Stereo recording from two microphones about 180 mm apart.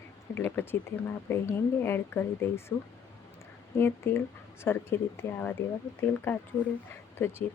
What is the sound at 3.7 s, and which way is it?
Speech, 15° left (ahead or behind).